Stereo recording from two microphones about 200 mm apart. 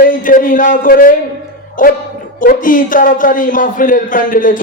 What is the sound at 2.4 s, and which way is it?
A man's voice, 45° left (ahead or behind).